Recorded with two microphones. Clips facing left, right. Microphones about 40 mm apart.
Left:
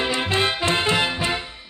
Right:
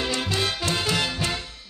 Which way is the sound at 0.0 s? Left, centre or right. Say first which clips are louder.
Left 4 dB; left.